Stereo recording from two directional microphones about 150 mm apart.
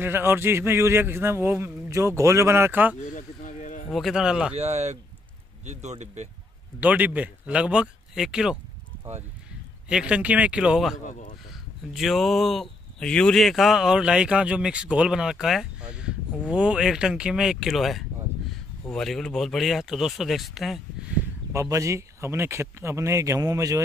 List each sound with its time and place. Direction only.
0.0 s a man's voice: 15° right (ahead or behind)
3.2 s a sound: 55° left (ahead or behind)
3.9 s speech: centre (ahead or behind)
4.6 s speech: 45° right (ahead or behind)
6.8 s a man's voice: 10° right (ahead or behind)
9.8 s a man's voice: 5° right (ahead or behind)
11.1 s a sound: 55° left (ahead or behind)
11.9 s speech: centre (ahead or behind)
21.5 s speech: 20° right (ahead or behind)